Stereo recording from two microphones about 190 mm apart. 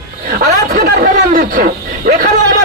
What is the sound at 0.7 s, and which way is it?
Speech, 50° right (ahead or behind).